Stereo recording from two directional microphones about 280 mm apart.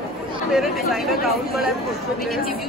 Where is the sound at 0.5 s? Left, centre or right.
Centre.